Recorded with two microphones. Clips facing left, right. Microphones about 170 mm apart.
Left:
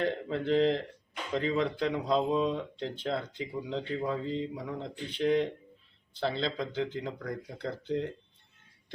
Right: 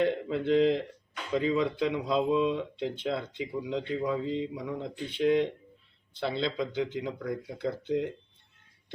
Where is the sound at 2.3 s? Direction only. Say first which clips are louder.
Right 2 dB; 40° left (ahead or behind).